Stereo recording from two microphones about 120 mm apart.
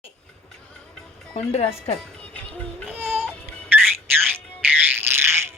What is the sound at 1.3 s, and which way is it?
Speech, 60° left (ahead or behind).